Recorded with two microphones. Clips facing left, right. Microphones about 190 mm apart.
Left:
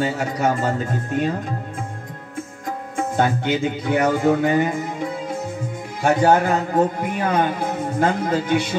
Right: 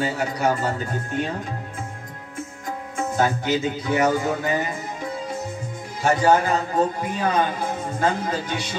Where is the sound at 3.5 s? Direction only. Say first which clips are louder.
Left 2 dB; 55° left (ahead or behind).